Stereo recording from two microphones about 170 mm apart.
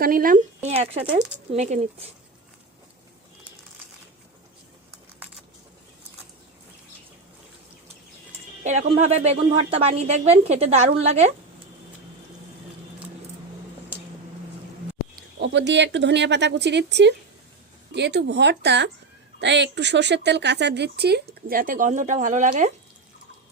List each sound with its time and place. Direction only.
0.0 s a woman's voice: 55° right (ahead or behind); by 2.0 s 40° right (ahead or behind)
8.6 s a woman's voice: 45° right (ahead or behind)
15.1 s speech: 90° right; by 22.7 s 45° right (ahead or behind)